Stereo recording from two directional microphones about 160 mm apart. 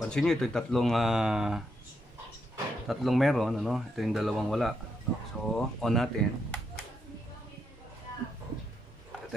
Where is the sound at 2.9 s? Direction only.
Centre (ahead or behind).